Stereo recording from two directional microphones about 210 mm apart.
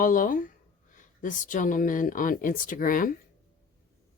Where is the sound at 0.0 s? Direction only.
40° left (ahead or behind).